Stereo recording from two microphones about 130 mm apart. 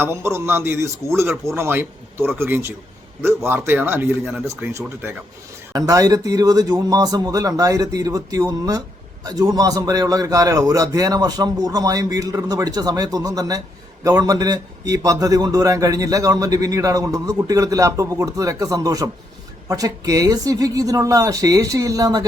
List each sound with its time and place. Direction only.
0.0 s a man's voice: 20° right (ahead or behind)